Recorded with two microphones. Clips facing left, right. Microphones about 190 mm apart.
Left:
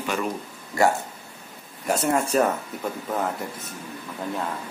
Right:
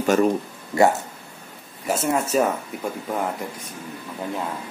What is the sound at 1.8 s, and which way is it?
Speech, centre (ahead or behind).